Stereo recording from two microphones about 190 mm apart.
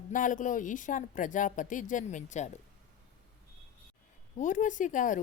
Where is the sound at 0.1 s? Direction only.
45° left (ahead or behind).